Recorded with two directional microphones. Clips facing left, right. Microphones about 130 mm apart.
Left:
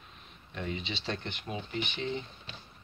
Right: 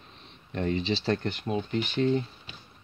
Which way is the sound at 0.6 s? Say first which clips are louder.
Right 9 dB; 40° right (ahead or behind).